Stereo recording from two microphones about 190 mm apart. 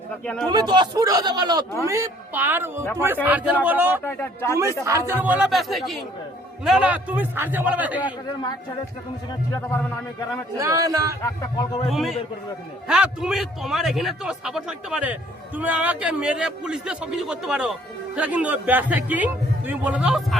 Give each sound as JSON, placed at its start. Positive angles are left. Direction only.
{"t": 0.4, "sound": "a man's voice", "side_deg": -20}
{"t": 4.0, "sound": "a man's voice", "side_deg": 10}
{"t": 4.9, "sound": "a man's voice", "side_deg": -15}
{"t": 9.5, "sound": "a man's voice", "side_deg": 15}
{"t": 10.6, "sound": "a man's voice", "side_deg": -15}
{"t": 11.2, "sound": "a man's voice", "side_deg": 15}
{"t": 11.9, "sound": "a man's voice", "side_deg": 0}